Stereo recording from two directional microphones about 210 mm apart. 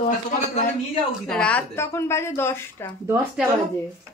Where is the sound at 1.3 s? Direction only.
5° left (ahead or behind).